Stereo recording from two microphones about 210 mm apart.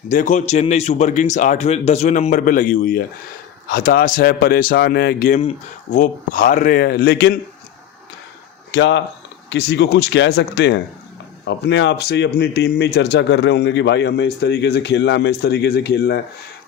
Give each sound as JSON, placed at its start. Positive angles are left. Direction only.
{"t": 0.1, "sound": "a man's voice", "side_deg": 40}
{"t": 5.4, "sound": "speech", "side_deg": 25}
{"t": 6.0, "sound": "a man's voice", "side_deg": 40}
{"t": 8.7, "sound": "a man's voice", "side_deg": 60}